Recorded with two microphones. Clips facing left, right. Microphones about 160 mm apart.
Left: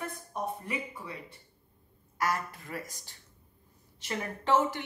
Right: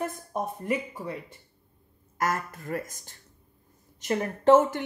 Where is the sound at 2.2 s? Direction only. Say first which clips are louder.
Right 3 dB; 45° right (ahead or behind).